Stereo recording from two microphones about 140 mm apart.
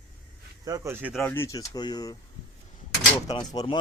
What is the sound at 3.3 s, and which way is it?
Speech, 30° left (ahead or behind).